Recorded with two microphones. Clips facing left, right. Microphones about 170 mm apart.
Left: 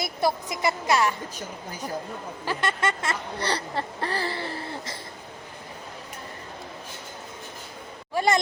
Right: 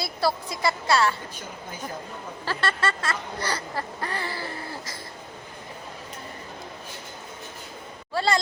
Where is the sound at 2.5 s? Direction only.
15° left (ahead or behind).